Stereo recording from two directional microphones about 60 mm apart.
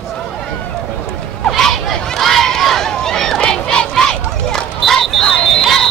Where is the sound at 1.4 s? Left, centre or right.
Centre.